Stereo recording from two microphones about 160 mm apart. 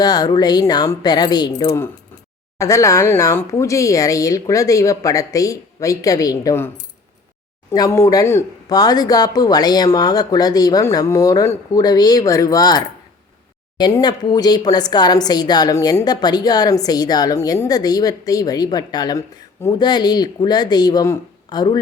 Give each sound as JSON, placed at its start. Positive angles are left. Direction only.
{"t": 0.0, "sound": "speech", "side_deg": 25}
{"t": 7.7, "sound": "speech", "side_deg": 20}